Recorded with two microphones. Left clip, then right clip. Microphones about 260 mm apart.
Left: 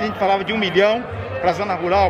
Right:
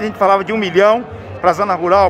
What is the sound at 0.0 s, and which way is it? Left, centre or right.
A man's voice, centre.